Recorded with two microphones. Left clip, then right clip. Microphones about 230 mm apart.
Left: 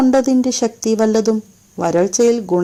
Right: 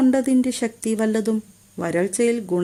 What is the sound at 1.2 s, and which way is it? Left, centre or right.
Speech, centre.